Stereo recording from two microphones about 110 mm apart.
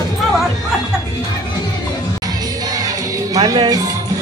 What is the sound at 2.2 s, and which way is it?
Music, 35° right (ahead or behind).